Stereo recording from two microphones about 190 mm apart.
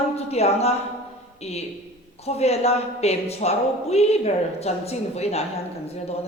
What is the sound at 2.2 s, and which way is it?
A woman's voice, 35° left (ahead or behind).